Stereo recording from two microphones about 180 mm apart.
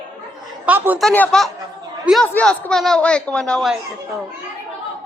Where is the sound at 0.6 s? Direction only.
10° right (ahead or behind).